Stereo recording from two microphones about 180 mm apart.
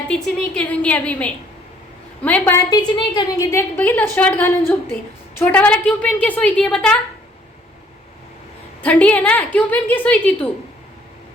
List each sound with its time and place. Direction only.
0.1 s a woman's voice: 5° left (ahead or behind); by 3.6 s 20° left (ahead or behind)
3.8 s a woman's voice: 10° left (ahead or behind)
8.8 s a woman's voice: 10° left (ahead or behind)